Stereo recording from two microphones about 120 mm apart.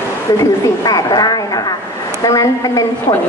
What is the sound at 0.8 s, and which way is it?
A woman's voice, 30° left (ahead or behind).